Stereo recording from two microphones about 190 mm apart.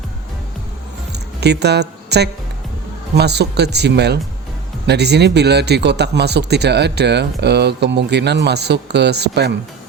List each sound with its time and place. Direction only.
1.4 s speech: 60° right (ahead or behind)